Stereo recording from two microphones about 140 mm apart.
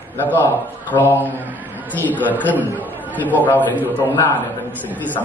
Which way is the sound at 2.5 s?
10° right (ahead or behind).